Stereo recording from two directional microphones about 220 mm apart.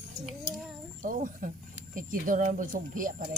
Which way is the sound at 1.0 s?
40° right (ahead or behind).